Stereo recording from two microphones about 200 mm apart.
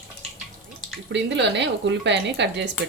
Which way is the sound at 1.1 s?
60° right (ahead or behind).